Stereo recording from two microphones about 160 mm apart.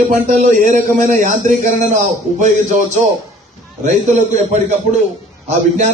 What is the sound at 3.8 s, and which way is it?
Speech, 50° right (ahead or behind).